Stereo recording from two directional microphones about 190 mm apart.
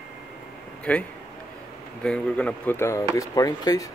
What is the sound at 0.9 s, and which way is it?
Speech, 5° left (ahead or behind).